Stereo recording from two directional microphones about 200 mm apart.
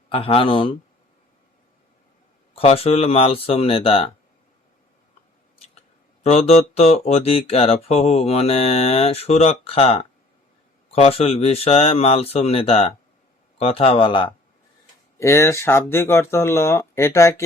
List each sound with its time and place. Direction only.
0.1 s speech: 25° left (ahead or behind)
2.6 s speech: 30° left (ahead or behind)
6.2 s speech: 30° left (ahead or behind)
15.2 s speech: 15° left (ahead or behind)